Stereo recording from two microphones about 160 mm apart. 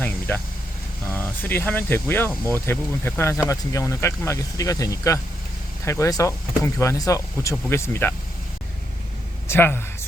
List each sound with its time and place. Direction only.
1.1 s speech: 10° left (ahead or behind)
9.5 s speech: 15° left (ahead or behind)